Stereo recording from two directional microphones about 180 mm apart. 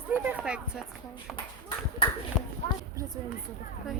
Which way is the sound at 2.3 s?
Centre (ahead or behind).